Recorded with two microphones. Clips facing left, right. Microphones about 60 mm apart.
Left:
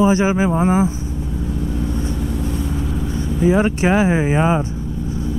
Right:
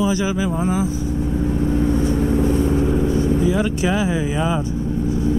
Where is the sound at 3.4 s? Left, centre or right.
Left.